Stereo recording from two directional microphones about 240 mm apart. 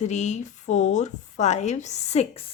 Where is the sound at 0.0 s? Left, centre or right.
Left.